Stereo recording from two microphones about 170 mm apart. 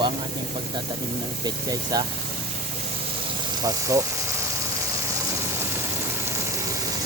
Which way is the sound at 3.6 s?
20° right (ahead or behind).